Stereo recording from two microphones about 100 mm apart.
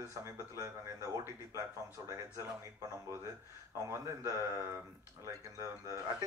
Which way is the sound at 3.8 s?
30° right (ahead or behind).